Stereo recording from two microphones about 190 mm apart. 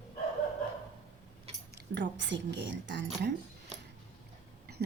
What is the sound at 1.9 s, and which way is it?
A woman's voice, 70° right (ahead or behind).